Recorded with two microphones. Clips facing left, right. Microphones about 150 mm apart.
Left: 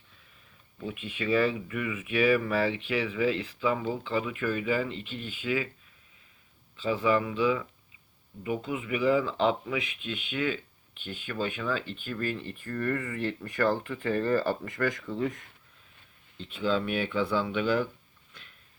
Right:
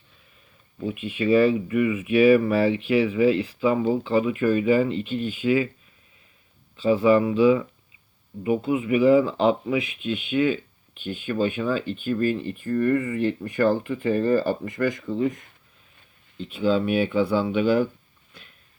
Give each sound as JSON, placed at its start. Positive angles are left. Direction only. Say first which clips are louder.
{"t": 0.9, "sound": "speech", "louder": "right 7 dB", "side_deg": -10}
{"t": 3.8, "sound": "speech", "louder": "right 9 dB", "side_deg": -25}
{"t": 6.7, "sound": "speech", "louder": "right 9 dB", "side_deg": -15}
{"t": 8.4, "sound": "speech", "louder": "right 9 dB", "side_deg": -15}
{"t": 16.4, "sound": "speech", "louder": "right 6 dB", "side_deg": -5}